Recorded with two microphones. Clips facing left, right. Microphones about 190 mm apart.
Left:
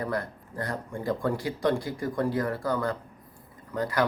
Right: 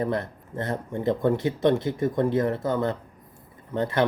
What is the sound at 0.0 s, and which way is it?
A man's voice, 25° right (ahead or behind).